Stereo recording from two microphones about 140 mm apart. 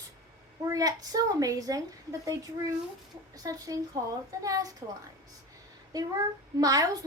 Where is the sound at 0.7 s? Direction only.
25° right (ahead or behind).